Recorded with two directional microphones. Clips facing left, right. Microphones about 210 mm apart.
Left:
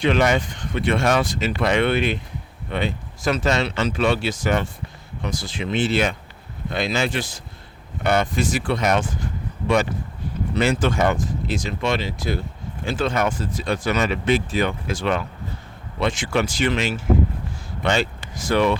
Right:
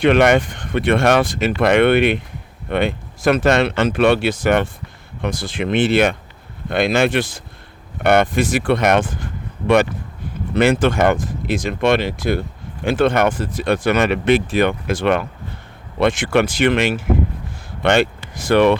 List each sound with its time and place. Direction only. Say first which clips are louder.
0.0 s speech: right 6 dB; 60° right (ahead or behind)